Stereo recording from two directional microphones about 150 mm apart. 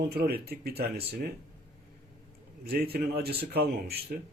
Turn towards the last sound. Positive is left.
turn(degrees=-90)